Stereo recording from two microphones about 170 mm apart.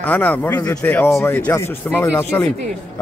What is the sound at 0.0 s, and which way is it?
A man's voice, 10° left (ahead or behind).